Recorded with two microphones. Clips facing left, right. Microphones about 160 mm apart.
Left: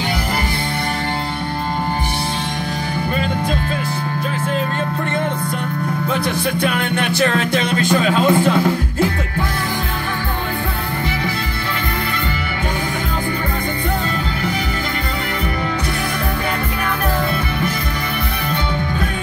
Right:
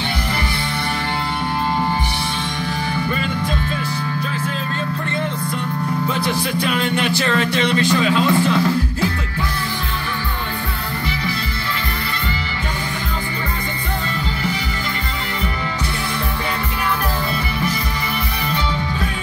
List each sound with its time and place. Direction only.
6.6 s speech: 50° left (ahead or behind)